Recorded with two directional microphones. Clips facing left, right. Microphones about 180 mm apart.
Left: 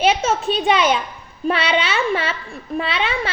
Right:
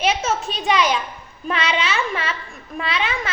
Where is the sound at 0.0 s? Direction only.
30° left (ahead or behind).